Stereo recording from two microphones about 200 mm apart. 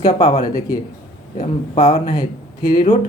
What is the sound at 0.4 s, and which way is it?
Speech, 20° left (ahead or behind).